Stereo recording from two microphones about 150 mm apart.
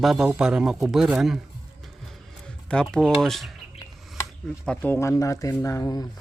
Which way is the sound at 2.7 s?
5° left (ahead or behind).